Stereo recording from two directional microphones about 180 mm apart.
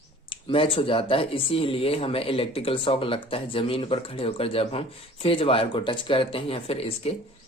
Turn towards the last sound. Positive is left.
turn(degrees=35)  # may be behind; listen again after turning